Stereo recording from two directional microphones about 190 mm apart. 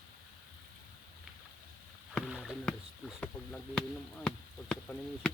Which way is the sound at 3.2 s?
5° left (ahead or behind).